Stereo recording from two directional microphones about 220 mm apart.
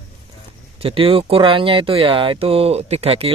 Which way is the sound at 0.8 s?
25° right (ahead or behind).